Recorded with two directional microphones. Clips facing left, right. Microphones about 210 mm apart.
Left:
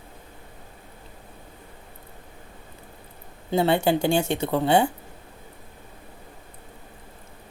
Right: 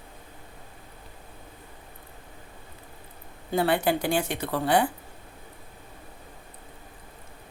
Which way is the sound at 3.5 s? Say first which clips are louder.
Left 3 dB; 25° left (ahead or behind).